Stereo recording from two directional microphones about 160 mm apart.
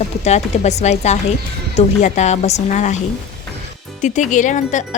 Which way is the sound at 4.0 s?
50° left (ahead or behind).